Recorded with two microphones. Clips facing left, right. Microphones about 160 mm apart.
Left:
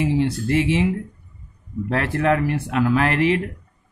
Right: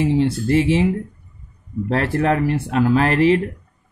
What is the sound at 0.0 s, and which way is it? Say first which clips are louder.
Speech: right 3 dB; 30° right (ahead or behind).